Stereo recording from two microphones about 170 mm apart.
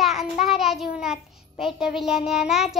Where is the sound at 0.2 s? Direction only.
Centre (ahead or behind).